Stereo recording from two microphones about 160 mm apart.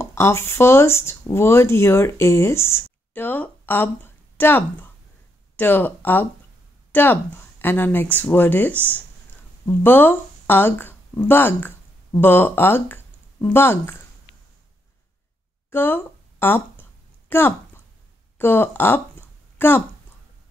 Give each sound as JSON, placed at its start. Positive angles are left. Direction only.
{"t": 0.0, "sound": "speech", "side_deg": 15}
{"t": 15.7, "sound": "speech", "side_deg": 15}
{"t": 18.4, "sound": "a sound", "side_deg": 15}